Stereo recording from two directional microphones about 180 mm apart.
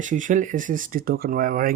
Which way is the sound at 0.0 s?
45° right (ahead or behind).